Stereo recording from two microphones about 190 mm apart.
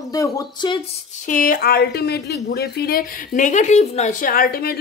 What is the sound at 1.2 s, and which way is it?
A woman's voice, 45° left (ahead or behind).